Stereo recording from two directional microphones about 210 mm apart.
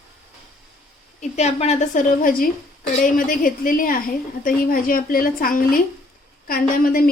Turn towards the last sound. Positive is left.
turn(degrees=45)  # may be behind; listen again after turning